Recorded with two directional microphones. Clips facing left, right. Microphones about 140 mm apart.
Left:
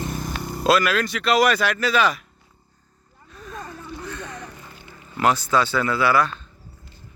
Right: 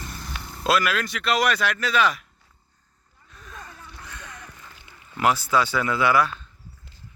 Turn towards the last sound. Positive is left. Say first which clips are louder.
# left 1 dB
turn(degrees=-10)  # may be behind; listen again after turning